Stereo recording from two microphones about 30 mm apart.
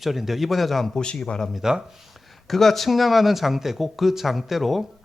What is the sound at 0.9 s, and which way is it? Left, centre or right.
Speech, left.